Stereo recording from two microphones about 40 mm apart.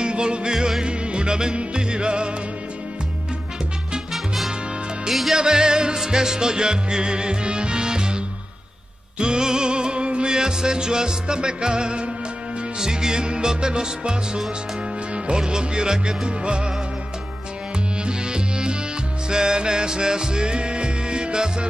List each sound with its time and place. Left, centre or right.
0.0 s music: right
0.8 s music: right
5.3 s music: centre
9.2 s music: centre
17.7 s music: right